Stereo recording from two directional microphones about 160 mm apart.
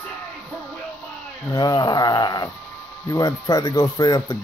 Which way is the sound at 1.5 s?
25° left (ahead or behind).